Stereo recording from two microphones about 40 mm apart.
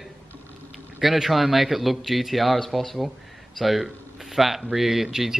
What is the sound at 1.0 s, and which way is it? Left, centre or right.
Speech, centre.